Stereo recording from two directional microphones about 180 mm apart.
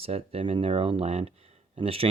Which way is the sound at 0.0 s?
35° right (ahead or behind).